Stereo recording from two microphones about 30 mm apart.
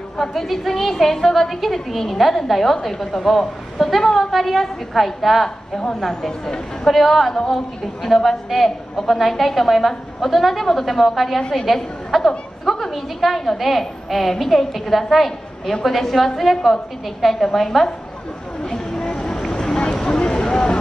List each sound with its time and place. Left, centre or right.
0.4 s a woman's voice: centre
4.3 s a woman's voice: centre
12.2 s chatter: centre
12.9 s a woman's voice: centre
18.6 s a sound: left
19.1 s vehicle: centre